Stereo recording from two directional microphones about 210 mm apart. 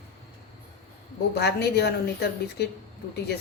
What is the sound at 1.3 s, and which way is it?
Speech, 50° left (ahead or behind).